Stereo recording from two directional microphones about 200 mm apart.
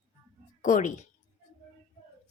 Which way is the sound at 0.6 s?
40° left (ahead or behind).